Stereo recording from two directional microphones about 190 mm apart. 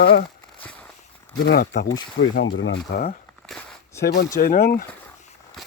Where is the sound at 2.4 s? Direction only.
90° left.